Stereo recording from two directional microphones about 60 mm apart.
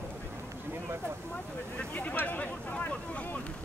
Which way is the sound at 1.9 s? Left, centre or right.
Left.